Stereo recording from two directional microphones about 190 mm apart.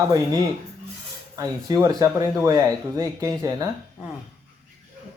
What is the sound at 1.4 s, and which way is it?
Speech, 20° right (ahead or behind).